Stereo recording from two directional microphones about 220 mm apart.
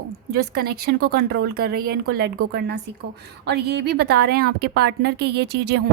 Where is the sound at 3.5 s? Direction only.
50° right (ahead or behind).